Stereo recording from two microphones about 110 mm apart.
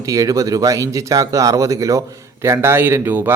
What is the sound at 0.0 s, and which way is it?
Speech, 30° right (ahead or behind).